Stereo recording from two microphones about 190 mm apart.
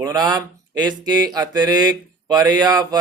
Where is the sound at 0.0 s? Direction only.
20° right (ahead or behind).